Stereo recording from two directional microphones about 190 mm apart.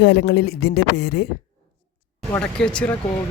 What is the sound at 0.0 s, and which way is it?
Speech, 60° left (ahead or behind).